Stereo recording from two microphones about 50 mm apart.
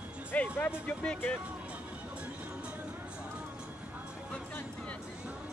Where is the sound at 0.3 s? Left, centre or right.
Left.